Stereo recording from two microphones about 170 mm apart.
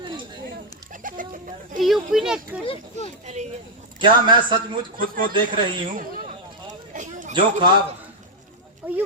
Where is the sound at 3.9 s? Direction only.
30° right (ahead or behind).